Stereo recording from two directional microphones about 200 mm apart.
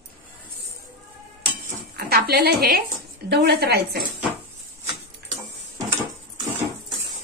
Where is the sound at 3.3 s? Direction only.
55° right (ahead or behind).